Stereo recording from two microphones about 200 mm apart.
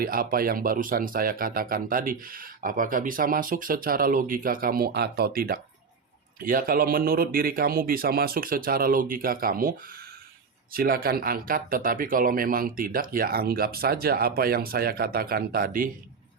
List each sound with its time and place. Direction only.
0.0 s speech: 45° right (ahead or behind)